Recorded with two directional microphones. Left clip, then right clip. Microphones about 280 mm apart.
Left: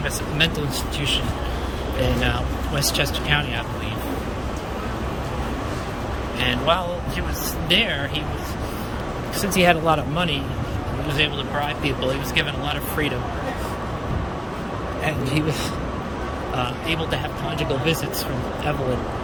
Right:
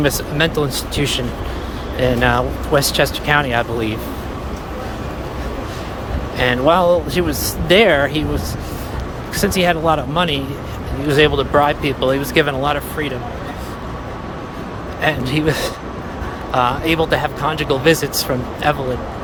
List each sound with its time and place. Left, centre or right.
0.0 s speech: centre
2.2 s speech: centre
6.4 s speech: centre
9.4 s speech: centre
15.0 s speech: centre
16.6 s speech: centre